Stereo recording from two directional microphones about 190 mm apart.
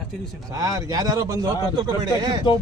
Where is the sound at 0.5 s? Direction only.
20° right (ahead or behind).